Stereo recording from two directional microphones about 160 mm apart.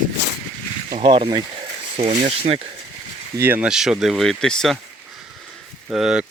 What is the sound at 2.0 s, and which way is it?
Speech, 40° right (ahead or behind).